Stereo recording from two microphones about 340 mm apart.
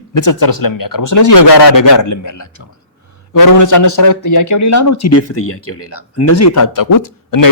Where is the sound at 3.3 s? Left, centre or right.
Left.